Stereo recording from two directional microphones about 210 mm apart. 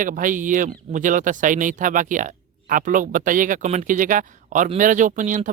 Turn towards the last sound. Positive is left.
turn(degrees=-40)  # may be behind; listen again after turning